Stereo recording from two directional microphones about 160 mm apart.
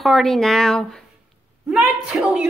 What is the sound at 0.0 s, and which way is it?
Speech, centre (ahead or behind).